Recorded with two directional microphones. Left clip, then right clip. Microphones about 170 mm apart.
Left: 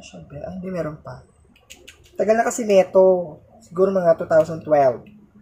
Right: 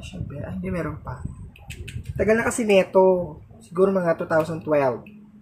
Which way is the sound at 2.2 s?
Centre (ahead or behind).